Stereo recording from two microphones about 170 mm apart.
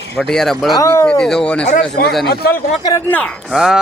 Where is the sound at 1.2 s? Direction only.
5° left (ahead or behind).